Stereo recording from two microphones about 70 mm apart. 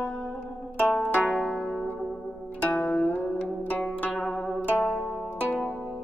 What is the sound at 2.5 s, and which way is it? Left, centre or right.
Zither, centre.